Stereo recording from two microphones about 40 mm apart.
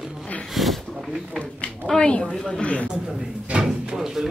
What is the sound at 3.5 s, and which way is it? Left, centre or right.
Speech, right.